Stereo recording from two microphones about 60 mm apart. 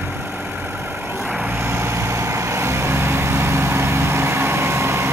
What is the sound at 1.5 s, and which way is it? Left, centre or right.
Vehicle, right.